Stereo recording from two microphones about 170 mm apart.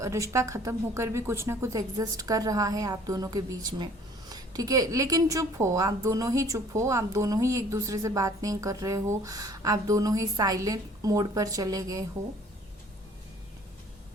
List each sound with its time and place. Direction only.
0.0 s a woman's voice: 20° right (ahead or behind)